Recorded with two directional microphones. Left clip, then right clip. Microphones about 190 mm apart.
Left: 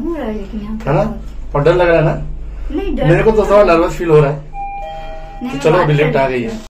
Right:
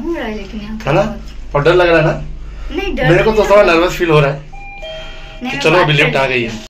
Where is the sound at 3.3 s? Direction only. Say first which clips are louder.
Left 1 dB; centre (ahead or behind).